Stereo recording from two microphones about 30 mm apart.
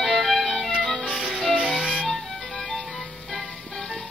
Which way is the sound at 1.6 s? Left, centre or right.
Right.